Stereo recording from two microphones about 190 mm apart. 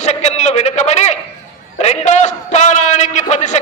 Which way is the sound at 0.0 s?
35° left (ahead or behind).